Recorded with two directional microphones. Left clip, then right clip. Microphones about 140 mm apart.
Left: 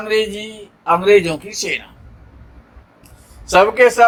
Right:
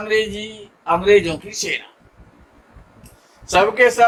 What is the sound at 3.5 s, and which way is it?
Speech, 40° left (ahead or behind).